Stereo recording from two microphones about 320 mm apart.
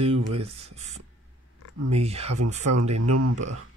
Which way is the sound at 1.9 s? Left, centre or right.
Centre.